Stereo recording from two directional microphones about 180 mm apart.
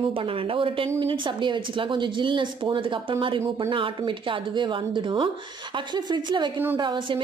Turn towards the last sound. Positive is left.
turn(degrees=-25)  # may be behind; listen again after turning